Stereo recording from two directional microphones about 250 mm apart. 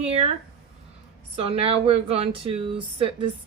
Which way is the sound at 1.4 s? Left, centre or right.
Right.